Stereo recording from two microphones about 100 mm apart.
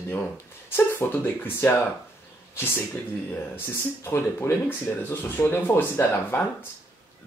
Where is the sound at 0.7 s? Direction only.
20° left (ahead or behind).